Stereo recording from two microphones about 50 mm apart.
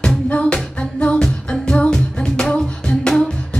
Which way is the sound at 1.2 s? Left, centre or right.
Centre.